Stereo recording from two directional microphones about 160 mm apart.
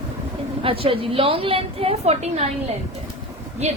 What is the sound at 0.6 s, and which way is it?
A woman's voice, 35° right (ahead or behind).